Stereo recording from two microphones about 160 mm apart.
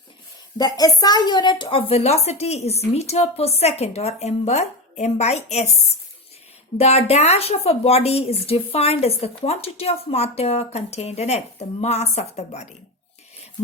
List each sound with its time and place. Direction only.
0.6 s a woman's voice: 25° left (ahead or behind); by 5.7 s 45° left (ahead or behind)
6.7 s a woman's voice: 40° left (ahead or behind)